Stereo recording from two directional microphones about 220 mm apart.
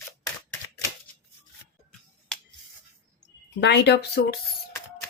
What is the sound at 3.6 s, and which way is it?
Speech, 50° left (ahead or behind).